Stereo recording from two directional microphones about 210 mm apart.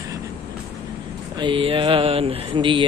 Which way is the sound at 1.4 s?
25° right (ahead or behind).